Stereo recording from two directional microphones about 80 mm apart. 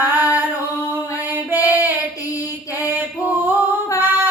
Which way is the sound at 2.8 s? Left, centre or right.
Right.